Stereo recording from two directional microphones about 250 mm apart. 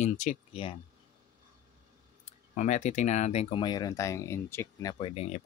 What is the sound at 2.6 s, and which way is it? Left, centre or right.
Speech, left.